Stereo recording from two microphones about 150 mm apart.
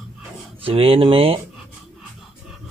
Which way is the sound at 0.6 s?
40° right (ahead or behind).